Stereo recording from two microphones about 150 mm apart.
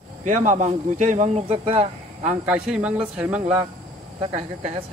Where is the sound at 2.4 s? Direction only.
5° right (ahead or behind).